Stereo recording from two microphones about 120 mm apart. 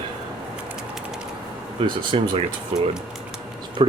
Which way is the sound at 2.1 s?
50° right (ahead or behind).